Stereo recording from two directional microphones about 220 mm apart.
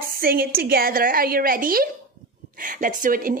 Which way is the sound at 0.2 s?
45° right (ahead or behind).